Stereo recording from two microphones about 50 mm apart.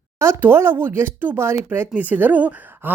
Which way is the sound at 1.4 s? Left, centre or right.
Right.